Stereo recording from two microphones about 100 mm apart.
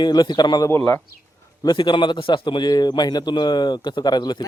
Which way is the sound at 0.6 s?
25° left (ahead or behind).